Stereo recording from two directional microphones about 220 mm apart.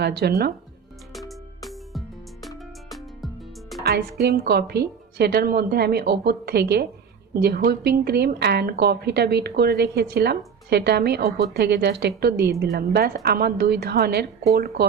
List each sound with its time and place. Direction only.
0.0 s a woman's voice: 50° right (ahead or behind)
1.3 s music: centre (ahead or behind)
3.8 s a woman's voice: 45° right (ahead or behind)